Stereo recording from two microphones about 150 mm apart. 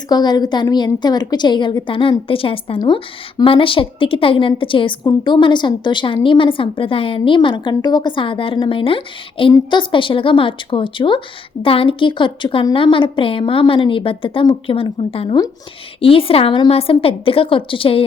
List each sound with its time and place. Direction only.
0.1 s a woman's voice: 25° left (ahead or behind)